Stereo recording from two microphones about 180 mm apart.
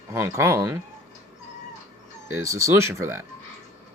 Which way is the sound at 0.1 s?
15° right (ahead or behind).